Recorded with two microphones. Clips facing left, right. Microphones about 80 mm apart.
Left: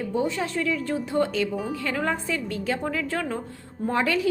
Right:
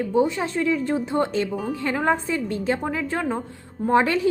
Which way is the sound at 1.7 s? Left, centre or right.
Right.